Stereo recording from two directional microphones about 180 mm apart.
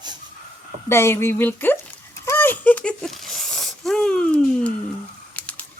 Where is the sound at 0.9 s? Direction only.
15° left (ahead or behind).